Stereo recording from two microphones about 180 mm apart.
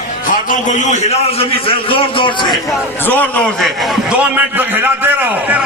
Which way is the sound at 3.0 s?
10° left (ahead or behind).